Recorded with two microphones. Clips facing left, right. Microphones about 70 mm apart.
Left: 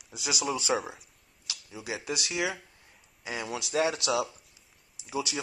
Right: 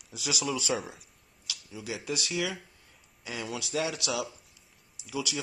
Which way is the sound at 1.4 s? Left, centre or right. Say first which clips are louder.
Left 1 dB; left.